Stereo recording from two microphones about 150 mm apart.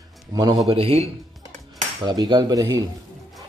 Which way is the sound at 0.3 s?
25° right (ahead or behind).